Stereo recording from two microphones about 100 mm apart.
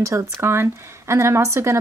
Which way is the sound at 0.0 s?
30° right (ahead or behind).